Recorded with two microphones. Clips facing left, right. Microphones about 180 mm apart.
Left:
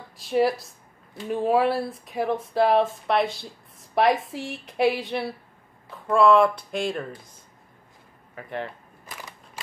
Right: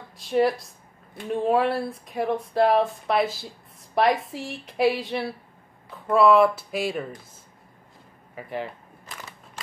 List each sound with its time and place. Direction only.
0.2 s speech: centre (ahead or behind)
8.4 s speech: 5° right (ahead or behind)